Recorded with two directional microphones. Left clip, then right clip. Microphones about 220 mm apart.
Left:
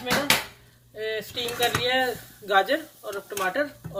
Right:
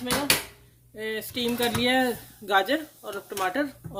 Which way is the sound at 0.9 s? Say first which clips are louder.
Left 1 dB; 50° right (ahead or behind).